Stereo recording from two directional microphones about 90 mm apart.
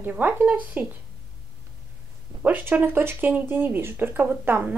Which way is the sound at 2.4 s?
20° right (ahead or behind).